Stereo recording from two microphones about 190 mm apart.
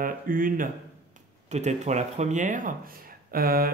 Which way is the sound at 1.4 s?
35° right (ahead or behind).